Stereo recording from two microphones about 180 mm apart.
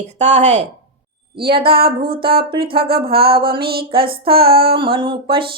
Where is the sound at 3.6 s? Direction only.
60° right (ahead or behind).